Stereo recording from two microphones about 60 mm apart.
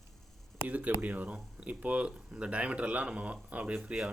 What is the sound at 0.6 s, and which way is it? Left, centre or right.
Speech, right.